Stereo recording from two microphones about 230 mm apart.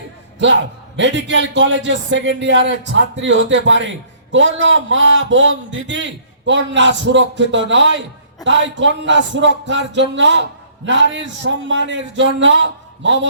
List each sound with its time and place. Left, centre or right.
0.9 s a man's voice: right